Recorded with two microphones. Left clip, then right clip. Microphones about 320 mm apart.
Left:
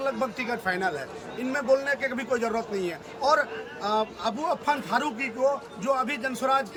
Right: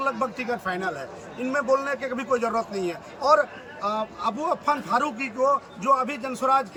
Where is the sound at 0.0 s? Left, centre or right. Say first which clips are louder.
Right 2 dB; centre.